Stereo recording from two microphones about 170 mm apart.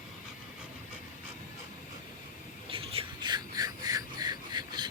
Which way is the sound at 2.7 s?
35° right (ahead or behind).